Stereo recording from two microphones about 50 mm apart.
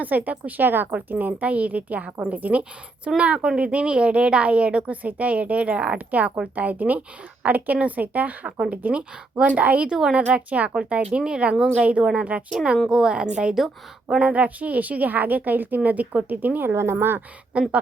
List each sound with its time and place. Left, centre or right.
0.0 s a woman's voice: right
12.9 s a woman's voice: centre
13.1 s a woman's voice: right
16.6 s a woman's voice: right
17.5 s a woman's voice: right